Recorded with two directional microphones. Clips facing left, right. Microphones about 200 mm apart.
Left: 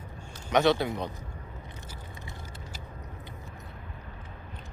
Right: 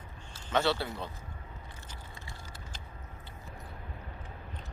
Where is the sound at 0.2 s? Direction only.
10° left (ahead or behind).